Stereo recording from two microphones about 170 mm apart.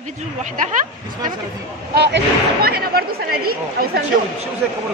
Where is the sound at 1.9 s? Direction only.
75° right (ahead or behind).